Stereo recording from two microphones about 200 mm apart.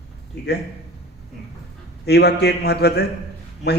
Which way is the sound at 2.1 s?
55° left (ahead or behind).